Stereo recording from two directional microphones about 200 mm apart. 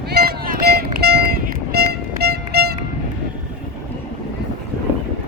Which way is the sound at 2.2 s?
50° right (ahead or behind).